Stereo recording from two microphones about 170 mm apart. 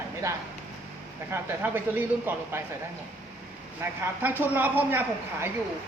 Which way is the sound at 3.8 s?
10° right (ahead or behind).